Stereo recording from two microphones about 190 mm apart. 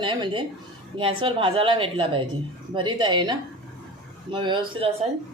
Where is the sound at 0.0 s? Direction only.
25° right (ahead or behind).